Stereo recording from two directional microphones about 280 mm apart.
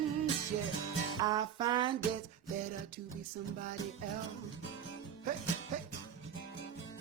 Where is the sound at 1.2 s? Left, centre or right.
Centre.